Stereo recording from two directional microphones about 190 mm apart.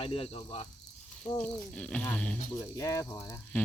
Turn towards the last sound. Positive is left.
turn(degrees=10)  # may be behind; listen again after turning